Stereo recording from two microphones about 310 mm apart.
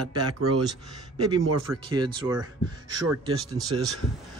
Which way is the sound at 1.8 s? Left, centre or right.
Centre.